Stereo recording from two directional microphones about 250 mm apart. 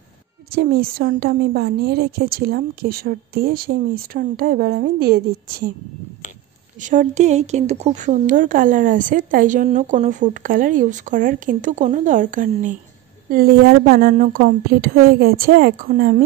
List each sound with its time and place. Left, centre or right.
0.5 s a woman's voice: right
6.8 s a woman's voice: right